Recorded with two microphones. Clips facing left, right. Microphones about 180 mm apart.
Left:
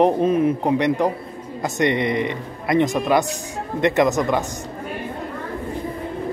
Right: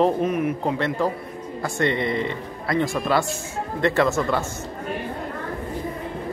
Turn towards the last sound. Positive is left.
turn(degrees=15)  # may be behind; listen again after turning